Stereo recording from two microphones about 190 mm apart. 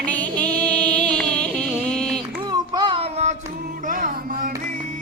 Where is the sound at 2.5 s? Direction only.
25° right (ahead or behind).